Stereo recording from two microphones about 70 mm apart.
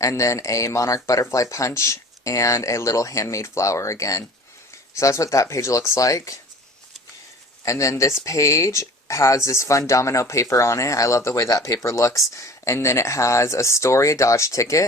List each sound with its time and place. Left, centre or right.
0.0 s speech: left
7.6 s speech: left
11.4 s speech: left